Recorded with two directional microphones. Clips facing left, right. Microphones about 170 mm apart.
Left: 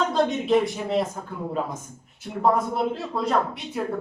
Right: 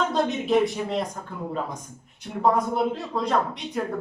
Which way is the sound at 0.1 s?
Centre (ahead or behind).